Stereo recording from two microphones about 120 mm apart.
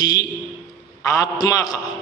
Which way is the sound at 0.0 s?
35° left (ahead or behind).